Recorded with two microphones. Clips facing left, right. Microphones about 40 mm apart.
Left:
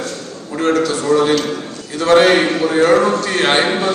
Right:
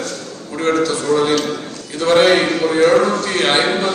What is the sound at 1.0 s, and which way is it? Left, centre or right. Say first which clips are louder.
A man's voice: left 3 dB; left.